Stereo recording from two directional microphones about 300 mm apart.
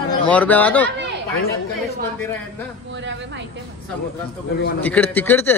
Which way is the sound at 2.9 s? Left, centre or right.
Right.